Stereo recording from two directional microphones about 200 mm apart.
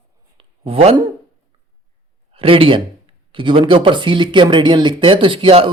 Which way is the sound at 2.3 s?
25° right (ahead or behind).